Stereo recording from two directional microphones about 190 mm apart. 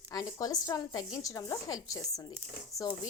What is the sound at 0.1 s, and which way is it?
Speech, 20° left (ahead or behind).